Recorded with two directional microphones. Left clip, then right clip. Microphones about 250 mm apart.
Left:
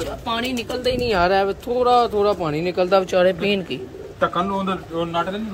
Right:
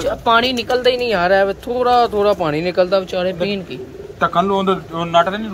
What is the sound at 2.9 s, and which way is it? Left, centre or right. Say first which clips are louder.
Speech: left 1 dB; centre.